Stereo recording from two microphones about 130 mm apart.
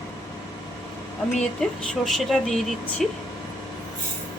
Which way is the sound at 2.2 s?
Centre (ahead or behind).